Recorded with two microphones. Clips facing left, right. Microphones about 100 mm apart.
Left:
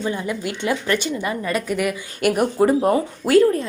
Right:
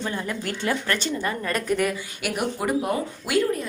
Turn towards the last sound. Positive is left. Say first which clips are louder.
# left 8 dB
turn(degrees=35)  # may be behind; listen again after turning